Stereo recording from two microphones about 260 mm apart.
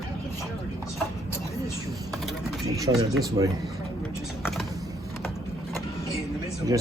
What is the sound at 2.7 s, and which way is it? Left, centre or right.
Speech, centre.